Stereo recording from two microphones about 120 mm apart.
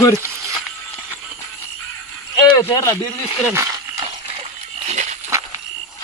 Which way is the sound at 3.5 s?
30° right (ahead or behind).